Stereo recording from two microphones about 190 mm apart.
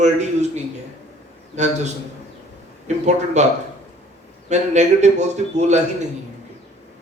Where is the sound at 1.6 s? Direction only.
40° right (ahead or behind).